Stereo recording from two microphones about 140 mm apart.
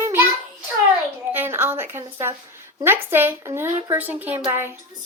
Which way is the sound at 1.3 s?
15° right (ahead or behind).